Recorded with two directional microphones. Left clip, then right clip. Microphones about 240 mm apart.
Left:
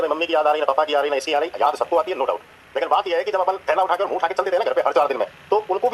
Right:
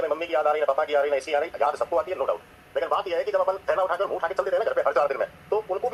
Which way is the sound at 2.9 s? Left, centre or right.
Left.